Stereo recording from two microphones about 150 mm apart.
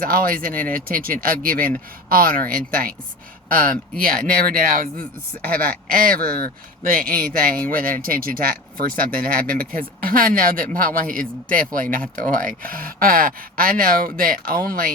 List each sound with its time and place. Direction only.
0.0 s speech: 70° right (ahead or behind)
4.0 s speech: 75° right (ahead or behind)